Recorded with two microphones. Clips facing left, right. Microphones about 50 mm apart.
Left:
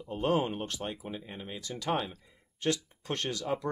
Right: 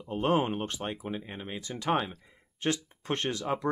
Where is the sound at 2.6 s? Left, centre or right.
Right.